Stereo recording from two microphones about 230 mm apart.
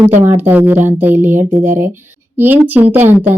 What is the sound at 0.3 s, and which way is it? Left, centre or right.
Speech, centre.